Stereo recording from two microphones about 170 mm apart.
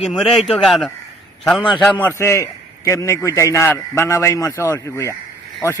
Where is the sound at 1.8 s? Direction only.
10° left (ahead or behind).